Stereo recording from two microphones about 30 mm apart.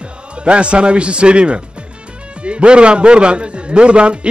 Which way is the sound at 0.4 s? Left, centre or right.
Right.